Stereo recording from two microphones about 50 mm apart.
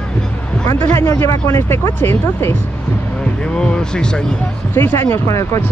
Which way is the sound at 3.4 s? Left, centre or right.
Centre.